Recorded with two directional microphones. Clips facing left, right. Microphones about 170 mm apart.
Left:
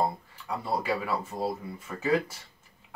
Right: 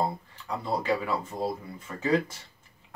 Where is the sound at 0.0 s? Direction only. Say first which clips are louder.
Left 1 dB; 10° left (ahead or behind).